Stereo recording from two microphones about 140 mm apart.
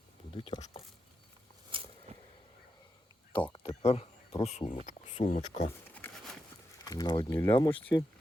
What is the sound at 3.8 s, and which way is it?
Speech, 45° left (ahead or behind).